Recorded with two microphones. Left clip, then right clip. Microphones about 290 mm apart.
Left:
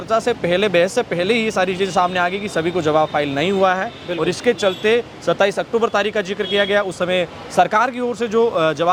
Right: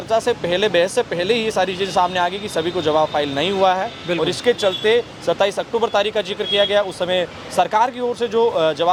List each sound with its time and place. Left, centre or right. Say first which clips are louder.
0.1 s speech: left 1 dB; left